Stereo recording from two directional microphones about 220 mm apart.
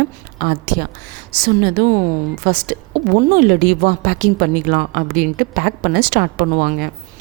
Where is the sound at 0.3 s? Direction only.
45° right (ahead or behind).